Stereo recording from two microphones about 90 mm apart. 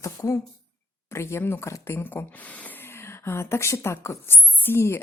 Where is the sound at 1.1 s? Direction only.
30° left (ahead or behind).